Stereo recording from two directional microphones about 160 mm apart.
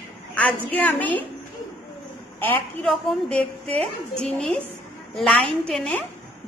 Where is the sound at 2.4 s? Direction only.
10° left (ahead or behind).